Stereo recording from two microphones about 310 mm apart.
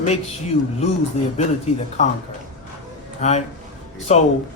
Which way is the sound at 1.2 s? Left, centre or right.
Centre.